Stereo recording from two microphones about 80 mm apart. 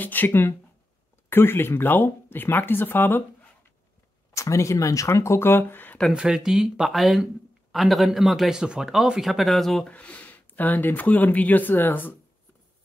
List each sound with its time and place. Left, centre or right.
0.0 s speech: left
4.4 s speech: left
6.1 s a man's voice: centre
9.8 s speech: centre